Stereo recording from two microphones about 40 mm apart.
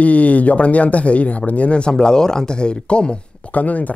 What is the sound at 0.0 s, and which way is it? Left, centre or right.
Speech, left.